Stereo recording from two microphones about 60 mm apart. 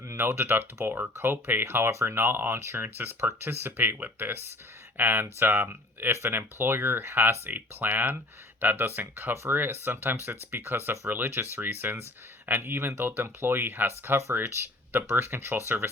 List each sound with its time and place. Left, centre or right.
0.1 s speech: right